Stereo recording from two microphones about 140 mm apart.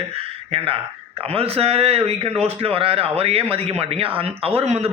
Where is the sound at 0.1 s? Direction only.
45° right (ahead or behind).